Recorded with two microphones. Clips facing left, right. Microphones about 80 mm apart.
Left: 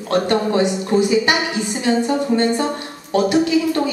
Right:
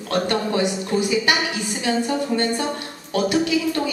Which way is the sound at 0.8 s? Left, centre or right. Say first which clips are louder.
Left 5 dB; left.